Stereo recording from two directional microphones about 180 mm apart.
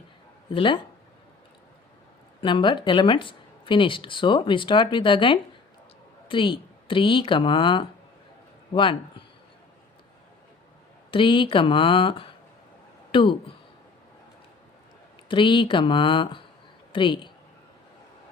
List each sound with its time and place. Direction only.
0.5 s speech: 30° left (ahead or behind)
2.4 s speech: 25° left (ahead or behind)
11.1 s speech: 30° left (ahead or behind)
13.1 s a sound: 25° left (ahead or behind)
15.3 s a woman's voice: 25° left (ahead or behind)